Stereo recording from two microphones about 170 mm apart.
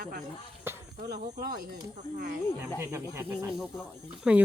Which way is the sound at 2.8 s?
15° right (ahead or behind).